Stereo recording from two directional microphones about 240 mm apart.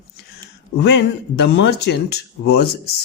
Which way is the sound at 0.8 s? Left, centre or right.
Left.